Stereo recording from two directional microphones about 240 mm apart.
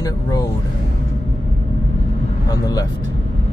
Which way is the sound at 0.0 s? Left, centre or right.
Centre.